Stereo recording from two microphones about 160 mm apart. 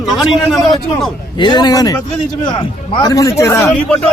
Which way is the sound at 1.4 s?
25° left (ahead or behind).